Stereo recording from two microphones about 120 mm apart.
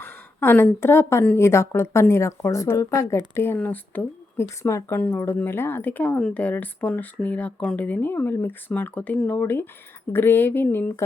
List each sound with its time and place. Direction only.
0.0 s a woman's voice: 20° left (ahead or behind)